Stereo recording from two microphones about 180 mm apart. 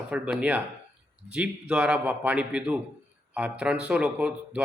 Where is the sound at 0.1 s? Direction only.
5° right (ahead or behind).